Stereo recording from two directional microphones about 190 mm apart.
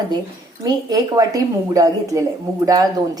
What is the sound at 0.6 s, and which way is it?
A woman's voice, 20° right (ahead or behind).